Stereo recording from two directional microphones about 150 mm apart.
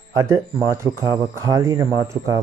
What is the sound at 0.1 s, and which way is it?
Speech, 20° right (ahead or behind).